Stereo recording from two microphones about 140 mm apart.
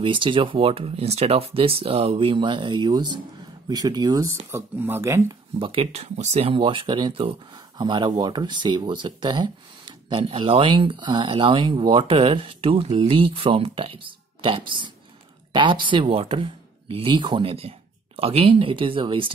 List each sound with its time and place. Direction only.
0.0 s speech: 35° right (ahead or behind); by 5.2 s 15° right (ahead or behind)
5.6 s speech: 40° right (ahead or behind)